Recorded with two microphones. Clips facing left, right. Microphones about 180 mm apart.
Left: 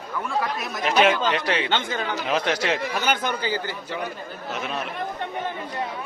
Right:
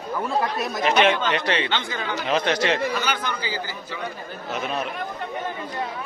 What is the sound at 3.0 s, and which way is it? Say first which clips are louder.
Speech: left 3 dB; 50° left (ahead or behind).